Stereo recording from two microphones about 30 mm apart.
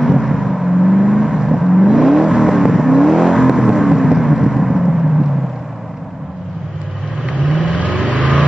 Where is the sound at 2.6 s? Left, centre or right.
Centre.